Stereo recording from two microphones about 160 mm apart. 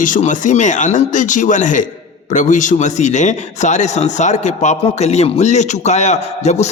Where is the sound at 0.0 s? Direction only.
55° left (ahead or behind).